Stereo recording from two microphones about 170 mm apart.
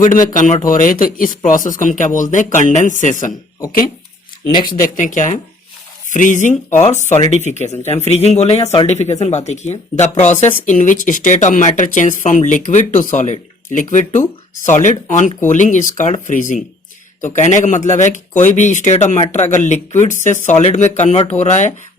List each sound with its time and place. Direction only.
0.0 s speech: 50° left (ahead or behind)
4.7 s speech: 50° left (ahead or behind)